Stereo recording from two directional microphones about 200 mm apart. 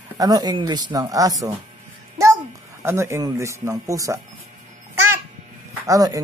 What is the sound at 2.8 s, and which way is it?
Speech, 15° right (ahead or behind).